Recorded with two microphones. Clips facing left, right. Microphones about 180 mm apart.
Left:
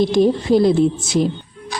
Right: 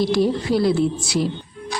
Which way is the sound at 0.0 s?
20° left (ahead or behind).